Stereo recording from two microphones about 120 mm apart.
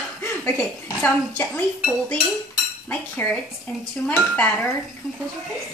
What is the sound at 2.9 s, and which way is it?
A woman's voice, 10° left (ahead or behind).